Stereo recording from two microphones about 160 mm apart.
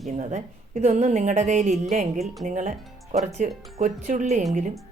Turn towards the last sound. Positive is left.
turn(degrees=-50)  # may be behind; listen again after turning